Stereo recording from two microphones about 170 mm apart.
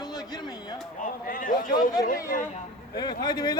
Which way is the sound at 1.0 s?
55° left (ahead or behind).